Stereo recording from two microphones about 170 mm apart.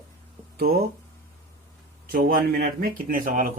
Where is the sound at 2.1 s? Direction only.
55° right (ahead or behind).